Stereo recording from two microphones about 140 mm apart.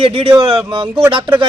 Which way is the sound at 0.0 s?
45° right (ahead or behind).